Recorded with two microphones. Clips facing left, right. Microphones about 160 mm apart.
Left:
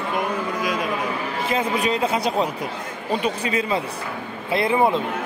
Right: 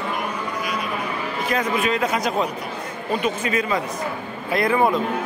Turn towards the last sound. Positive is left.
turn(degrees=25)  # may be behind; listen again after turning